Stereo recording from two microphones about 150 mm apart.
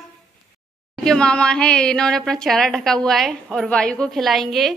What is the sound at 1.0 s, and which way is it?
A woman's voice, 5° left (ahead or behind).